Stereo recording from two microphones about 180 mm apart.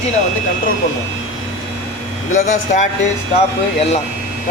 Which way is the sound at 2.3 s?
40° left (ahead or behind).